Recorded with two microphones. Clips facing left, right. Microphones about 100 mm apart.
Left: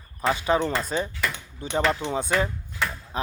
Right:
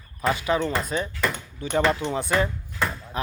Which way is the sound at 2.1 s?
20° left (ahead or behind).